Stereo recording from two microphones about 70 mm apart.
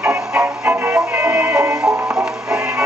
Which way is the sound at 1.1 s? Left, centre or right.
Right.